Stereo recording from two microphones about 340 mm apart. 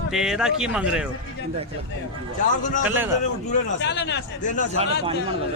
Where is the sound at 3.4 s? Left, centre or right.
Left.